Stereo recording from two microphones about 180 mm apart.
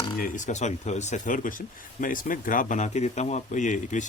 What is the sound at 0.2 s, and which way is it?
Speech, 45° left (ahead or behind).